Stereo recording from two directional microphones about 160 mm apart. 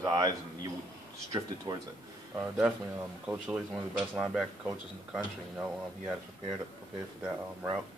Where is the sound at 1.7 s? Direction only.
25° right (ahead or behind).